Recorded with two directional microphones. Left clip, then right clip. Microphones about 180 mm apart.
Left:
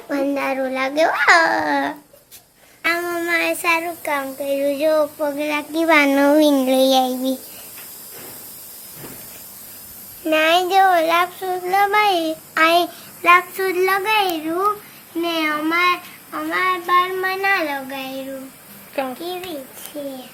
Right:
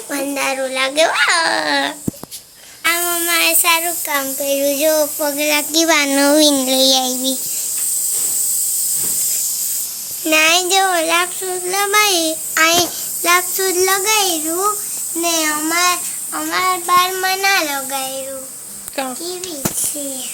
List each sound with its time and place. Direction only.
0.1 s child singing: centre (ahead or behind)
10.2 s child singing: 5° right (ahead or behind); by 17.7 s 20° right (ahead or behind)
19.0 s a child's voice: 10° right (ahead or behind)